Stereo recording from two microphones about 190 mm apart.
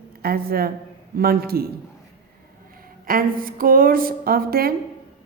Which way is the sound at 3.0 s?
50° right (ahead or behind).